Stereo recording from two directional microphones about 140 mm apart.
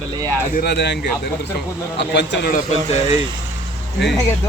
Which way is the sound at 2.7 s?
50° left (ahead or behind).